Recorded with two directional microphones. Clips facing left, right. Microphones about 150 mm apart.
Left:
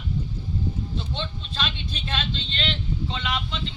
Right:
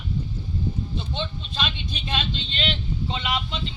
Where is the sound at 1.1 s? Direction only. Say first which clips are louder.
Right 2 dB; 10° right (ahead or behind).